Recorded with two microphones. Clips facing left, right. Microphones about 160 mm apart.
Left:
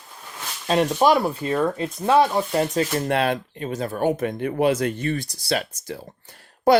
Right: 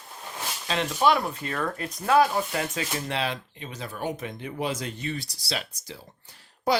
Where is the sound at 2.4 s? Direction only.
35° left (ahead or behind).